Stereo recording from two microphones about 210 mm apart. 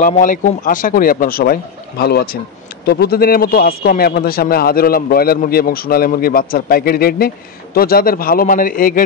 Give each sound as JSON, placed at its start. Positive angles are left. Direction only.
{"t": 0.0, "sound": "a man's voice", "side_deg": 40}